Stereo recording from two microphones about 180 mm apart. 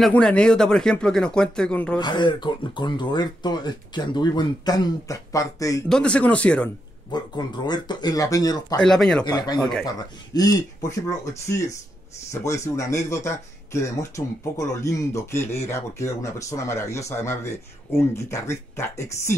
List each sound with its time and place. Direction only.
0.0 s speech: 5° left (ahead or behind)
2.0 s speech: 25° left (ahead or behind)
5.9 s speech: 5° left (ahead or behind)
7.1 s speech: 25° left (ahead or behind)
8.8 s speech: centre (ahead or behind)
9.2 s speech: 20° left (ahead or behind)